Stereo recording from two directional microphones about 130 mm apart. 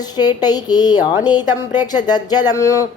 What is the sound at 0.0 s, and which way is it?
A woman's voice, 30° left (ahead or behind).